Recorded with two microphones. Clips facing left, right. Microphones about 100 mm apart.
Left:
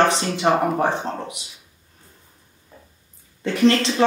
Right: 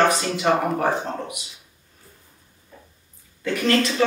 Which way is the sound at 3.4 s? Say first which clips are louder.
Left 3 dB; 30° left (ahead or behind).